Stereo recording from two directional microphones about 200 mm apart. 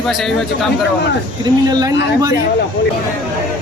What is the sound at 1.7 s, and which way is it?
Speech, 20° right (ahead or behind).